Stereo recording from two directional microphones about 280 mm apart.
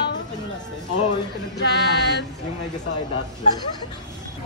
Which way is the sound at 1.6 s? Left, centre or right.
Left.